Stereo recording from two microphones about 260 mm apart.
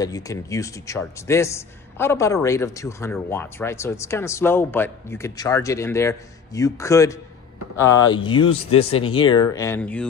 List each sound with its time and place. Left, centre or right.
0.0 s a man's voice: centre